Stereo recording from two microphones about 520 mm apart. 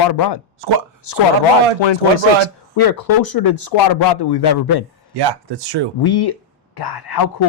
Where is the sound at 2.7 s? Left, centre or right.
Left.